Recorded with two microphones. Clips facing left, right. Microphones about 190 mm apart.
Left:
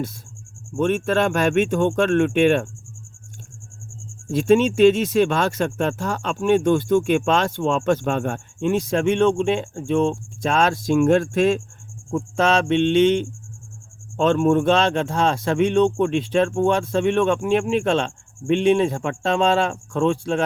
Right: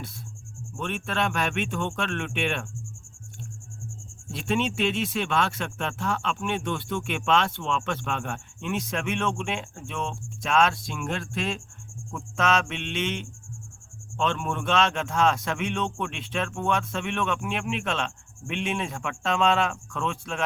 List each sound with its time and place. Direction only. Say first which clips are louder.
0.8 s speech: left 10 dB; 45° left (ahead or behind)
4.3 s speech: left 11 dB; 45° left (ahead or behind)
12.1 s speech: left 6 dB; 30° left (ahead or behind)